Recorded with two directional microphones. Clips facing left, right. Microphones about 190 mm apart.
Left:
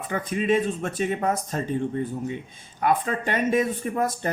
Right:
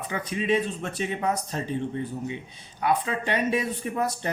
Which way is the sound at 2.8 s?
45° left (ahead or behind).